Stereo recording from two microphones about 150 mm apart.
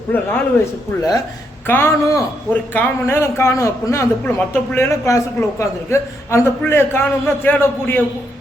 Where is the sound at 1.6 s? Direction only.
15° left (ahead or behind).